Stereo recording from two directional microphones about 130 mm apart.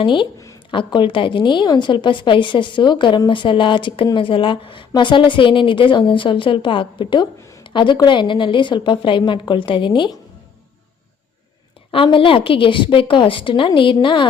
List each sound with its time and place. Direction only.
0.0 s a woman's voice: 40° left (ahead or behind)
0.3 s a sound: 25° left (ahead or behind)
0.7 s a woman's voice: 35° left (ahead or behind)
12.0 s a woman's voice: 40° left (ahead or behind)